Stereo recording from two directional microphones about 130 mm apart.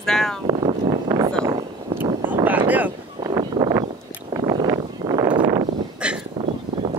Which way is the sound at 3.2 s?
35° right (ahead or behind).